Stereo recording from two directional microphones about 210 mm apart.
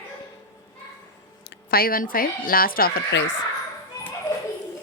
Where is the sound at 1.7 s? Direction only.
45° left (ahead or behind).